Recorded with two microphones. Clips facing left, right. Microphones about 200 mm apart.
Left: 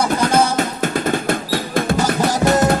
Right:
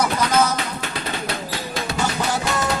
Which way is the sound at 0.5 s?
45° left (ahead or behind).